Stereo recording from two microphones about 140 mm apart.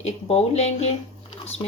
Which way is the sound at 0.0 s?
50° left (ahead or behind).